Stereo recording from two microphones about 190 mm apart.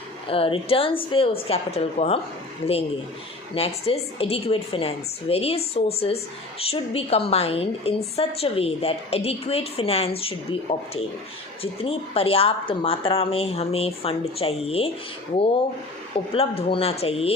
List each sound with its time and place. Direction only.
0.3 s speech: 30° left (ahead or behind)
3.5 s speech: 30° left (ahead or behind)
16.1 s speech: 30° left (ahead or behind)